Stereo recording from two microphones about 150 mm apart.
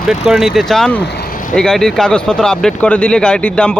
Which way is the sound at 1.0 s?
90° left.